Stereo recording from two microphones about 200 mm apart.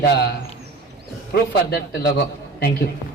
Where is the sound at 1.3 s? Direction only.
55° left (ahead or behind).